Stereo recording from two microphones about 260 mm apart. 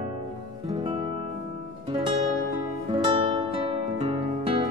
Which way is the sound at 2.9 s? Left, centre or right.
Centre.